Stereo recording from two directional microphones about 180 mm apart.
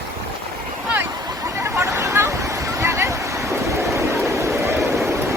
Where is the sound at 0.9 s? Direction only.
20° right (ahead or behind).